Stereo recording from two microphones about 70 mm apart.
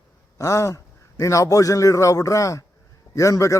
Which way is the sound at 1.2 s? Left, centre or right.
Left.